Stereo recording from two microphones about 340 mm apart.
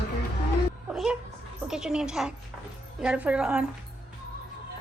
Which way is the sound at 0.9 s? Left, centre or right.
Centre.